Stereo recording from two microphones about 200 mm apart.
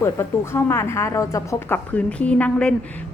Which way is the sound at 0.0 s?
15° left (ahead or behind).